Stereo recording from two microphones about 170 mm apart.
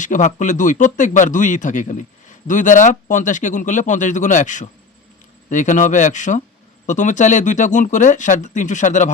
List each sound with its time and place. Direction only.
0.0 s speech: 45° left (ahead or behind)